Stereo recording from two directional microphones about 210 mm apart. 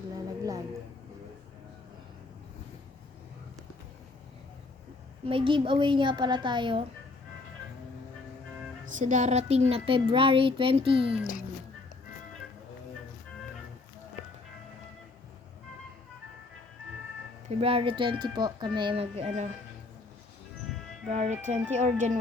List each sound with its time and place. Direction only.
5.2 s a child's voice: 25° right (ahead or behind)
9.0 s a child's voice: 35° right (ahead or behind)
11.2 s speech: 40° left (ahead or behind)
17.5 s a child's voice: 25° right (ahead or behind)
21.1 s speech: 30° right (ahead or behind)